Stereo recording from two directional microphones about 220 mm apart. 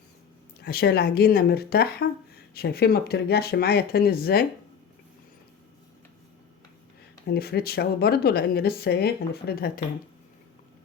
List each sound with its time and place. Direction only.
0.6 s speech: 45° left (ahead or behind)
7.3 s speech: 45° left (ahead or behind)